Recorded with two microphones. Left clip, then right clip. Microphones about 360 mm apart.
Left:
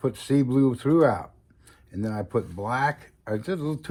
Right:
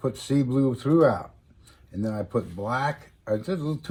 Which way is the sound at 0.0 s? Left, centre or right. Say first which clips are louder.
Left 2 dB; left.